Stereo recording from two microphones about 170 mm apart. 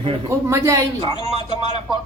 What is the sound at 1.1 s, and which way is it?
Speech, 30° left (ahead or behind).